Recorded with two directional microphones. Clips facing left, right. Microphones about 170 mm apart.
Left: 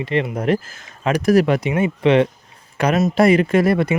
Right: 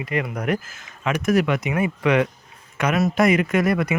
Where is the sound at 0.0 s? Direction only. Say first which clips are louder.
Left 5 dB; 25° left (ahead or behind).